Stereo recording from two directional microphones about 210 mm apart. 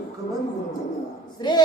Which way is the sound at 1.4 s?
20° left (ahead or behind).